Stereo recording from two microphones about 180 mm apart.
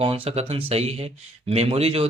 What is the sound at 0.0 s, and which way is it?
Speech, 35° right (ahead or behind).